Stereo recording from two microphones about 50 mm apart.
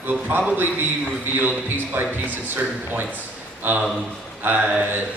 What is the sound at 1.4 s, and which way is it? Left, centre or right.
A man's voice, right.